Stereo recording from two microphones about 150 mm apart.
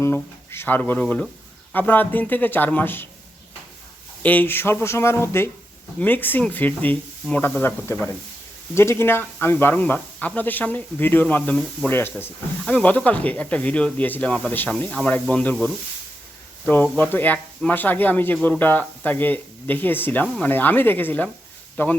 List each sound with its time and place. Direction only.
0.0 s speech: 15° left (ahead or behind)
4.2 s speech: 10° left (ahead or behind)
16.6 s speech: 10° left (ahead or behind)